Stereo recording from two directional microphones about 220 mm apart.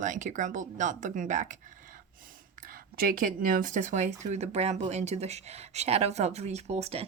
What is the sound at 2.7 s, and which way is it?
Speech, 40° right (ahead or behind).